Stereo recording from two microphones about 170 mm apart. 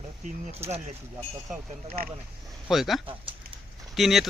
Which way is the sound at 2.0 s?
60° right (ahead or behind).